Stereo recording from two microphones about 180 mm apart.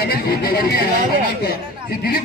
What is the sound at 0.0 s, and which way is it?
A man's voice, 60° left (ahead or behind).